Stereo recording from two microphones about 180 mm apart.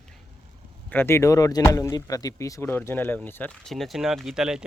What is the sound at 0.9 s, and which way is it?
Speech, 15° left (ahead or behind).